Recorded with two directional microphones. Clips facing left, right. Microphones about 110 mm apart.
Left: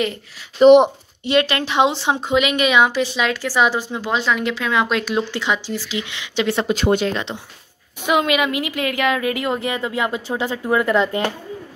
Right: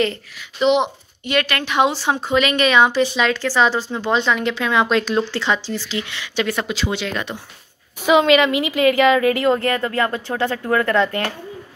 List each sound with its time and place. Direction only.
0.6 s speech: 50° left (ahead or behind)
1.2 s speech: 25° left (ahead or behind)
6.7 s speech: 50° left (ahead or behind)
7.1 s speech: 25° left (ahead or behind)
8.1 s speech: 5° left (ahead or behind)